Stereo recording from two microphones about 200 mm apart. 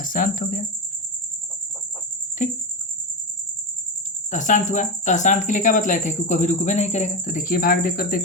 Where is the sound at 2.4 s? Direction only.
40° left (ahead or behind).